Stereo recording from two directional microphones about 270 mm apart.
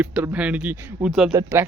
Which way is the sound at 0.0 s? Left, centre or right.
Centre.